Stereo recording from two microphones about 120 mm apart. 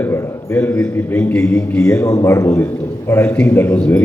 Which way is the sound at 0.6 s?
10° left (ahead or behind).